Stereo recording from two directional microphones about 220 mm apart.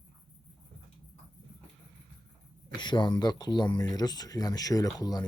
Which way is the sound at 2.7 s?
20° left (ahead or behind).